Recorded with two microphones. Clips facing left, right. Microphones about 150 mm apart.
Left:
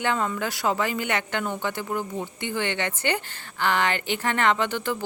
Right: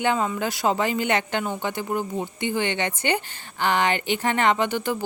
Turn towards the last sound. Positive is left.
turn(degrees=-15)  # may be behind; listen again after turning